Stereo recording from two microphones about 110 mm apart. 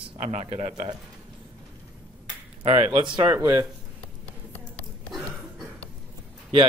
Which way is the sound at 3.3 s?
20° right (ahead or behind).